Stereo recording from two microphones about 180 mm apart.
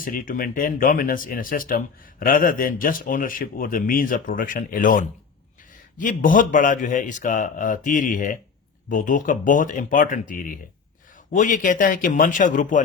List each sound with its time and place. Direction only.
0.0 s speech: 50° left (ahead or behind)